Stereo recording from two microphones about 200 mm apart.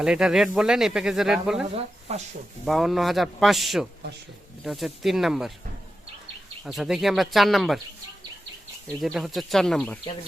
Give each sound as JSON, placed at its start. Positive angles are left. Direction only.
{"t": 0.0, "sound": "speech", "side_deg": -5}
{"t": 1.6, "sound": "speech", "side_deg": -35}
{"t": 2.6, "sound": "speech", "side_deg": 0}
{"t": 6.7, "sound": "speech", "side_deg": 0}
{"t": 8.9, "sound": "speech", "side_deg": 5}